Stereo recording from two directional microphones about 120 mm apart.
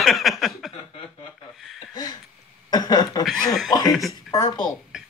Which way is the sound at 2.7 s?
35° left (ahead or behind).